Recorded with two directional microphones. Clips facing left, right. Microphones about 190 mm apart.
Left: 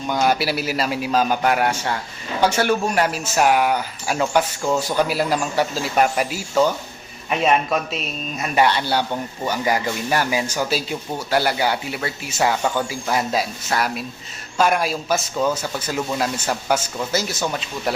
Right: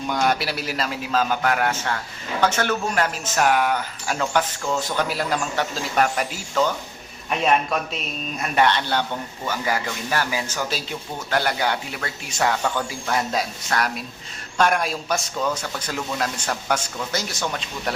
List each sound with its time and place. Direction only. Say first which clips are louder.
0.1 s speech: left 3 dB; 5° left (ahead or behind)